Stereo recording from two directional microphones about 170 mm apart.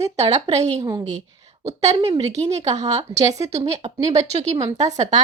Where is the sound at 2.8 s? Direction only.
40° right (ahead or behind).